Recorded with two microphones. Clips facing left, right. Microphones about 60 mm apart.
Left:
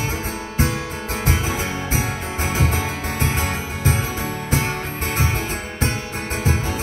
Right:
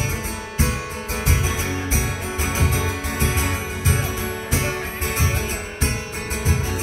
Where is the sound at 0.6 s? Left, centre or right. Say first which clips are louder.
Left 2 dB; left.